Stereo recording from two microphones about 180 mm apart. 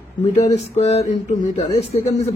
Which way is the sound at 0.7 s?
35° left (ahead or behind).